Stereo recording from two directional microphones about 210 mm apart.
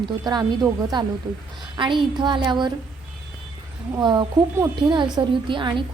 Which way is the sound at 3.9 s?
20° right (ahead or behind).